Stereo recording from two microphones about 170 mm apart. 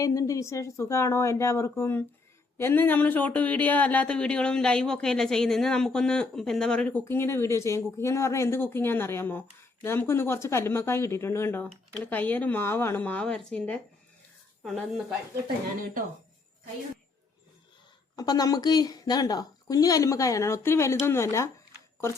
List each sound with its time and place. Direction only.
0.0 s a woman's voice: 20° left (ahead or behind); by 14.8 s centre (ahead or behind)
18.2 s a woman's voice: 20° left (ahead or behind)